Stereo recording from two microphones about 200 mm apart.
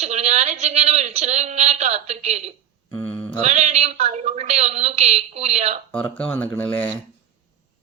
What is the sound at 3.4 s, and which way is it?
A woman's voice, 35° right (ahead or behind).